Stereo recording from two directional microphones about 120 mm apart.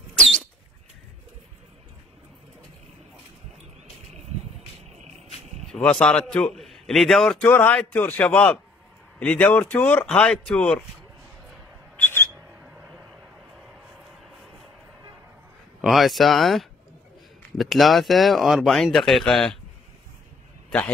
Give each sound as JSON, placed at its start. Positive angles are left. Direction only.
{"t": 5.7, "sound": "a man's voice", "side_deg": 5}
{"t": 7.4, "sound": "speech", "side_deg": 15}
{"t": 12.0, "sound": "a sound", "side_deg": 20}
{"t": 15.8, "sound": "speech", "side_deg": 0}